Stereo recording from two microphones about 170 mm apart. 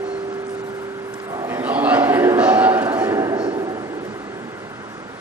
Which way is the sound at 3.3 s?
30° right (ahead or behind).